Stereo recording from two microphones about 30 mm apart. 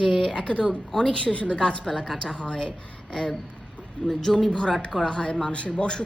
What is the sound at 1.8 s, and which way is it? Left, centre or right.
Speech, centre.